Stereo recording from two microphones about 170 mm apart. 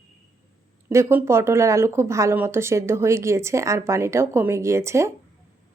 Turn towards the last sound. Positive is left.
turn(degrees=-15)  # may be behind; listen again after turning